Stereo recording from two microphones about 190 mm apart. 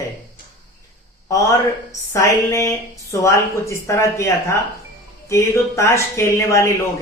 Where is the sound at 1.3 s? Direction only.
15° left (ahead or behind).